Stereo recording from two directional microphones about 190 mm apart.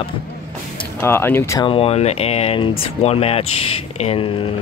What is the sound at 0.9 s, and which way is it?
Speech, 10° left (ahead or behind).